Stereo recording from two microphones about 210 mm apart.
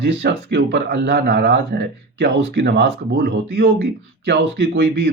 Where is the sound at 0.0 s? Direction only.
55° right (ahead or behind).